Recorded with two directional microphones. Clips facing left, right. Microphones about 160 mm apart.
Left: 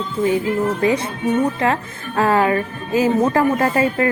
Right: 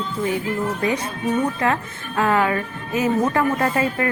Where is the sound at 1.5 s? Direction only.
30° left (ahead or behind).